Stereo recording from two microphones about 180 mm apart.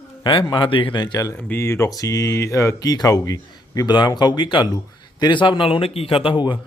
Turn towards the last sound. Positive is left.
turn(degrees=25)  # may be behind; listen again after turning